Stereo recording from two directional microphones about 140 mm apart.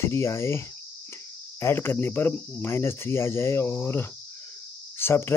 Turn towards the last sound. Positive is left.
turn(degrees=15)  # may be behind; listen again after turning